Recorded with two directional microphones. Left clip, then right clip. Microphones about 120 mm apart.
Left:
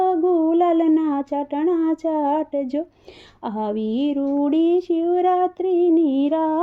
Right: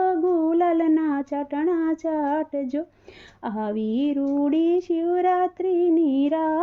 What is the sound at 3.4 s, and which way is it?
Female singing, 50° left (ahead or behind).